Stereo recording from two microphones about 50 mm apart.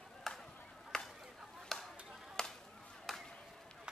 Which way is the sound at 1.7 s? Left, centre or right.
Centre.